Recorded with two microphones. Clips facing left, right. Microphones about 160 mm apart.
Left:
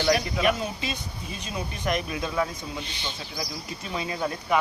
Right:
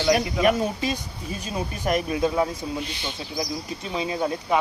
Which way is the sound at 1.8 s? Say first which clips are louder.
Right 6 dB; 30° right (ahead or behind).